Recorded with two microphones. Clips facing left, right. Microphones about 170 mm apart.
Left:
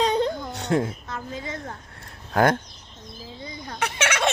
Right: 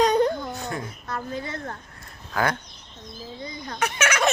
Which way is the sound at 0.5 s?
80° left.